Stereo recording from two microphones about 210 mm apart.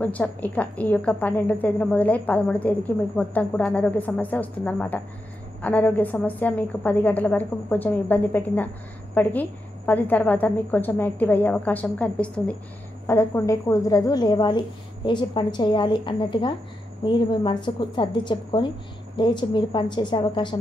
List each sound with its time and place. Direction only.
0.0 s a woman's voice: 5° left (ahead or behind); by 20.5 s 20° left (ahead or behind)